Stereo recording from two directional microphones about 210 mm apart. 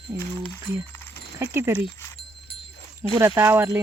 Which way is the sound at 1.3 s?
10° right (ahead or behind).